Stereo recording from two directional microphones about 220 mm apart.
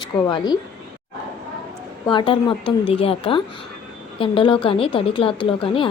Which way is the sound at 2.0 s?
20° left (ahead or behind).